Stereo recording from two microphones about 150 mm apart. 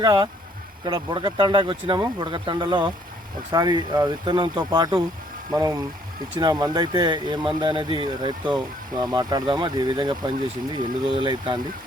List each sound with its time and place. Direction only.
0.0 s speech: 25° right (ahead or behind)